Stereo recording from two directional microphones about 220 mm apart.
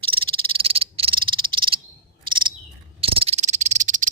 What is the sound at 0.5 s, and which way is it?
Frog, 25° right (ahead or behind).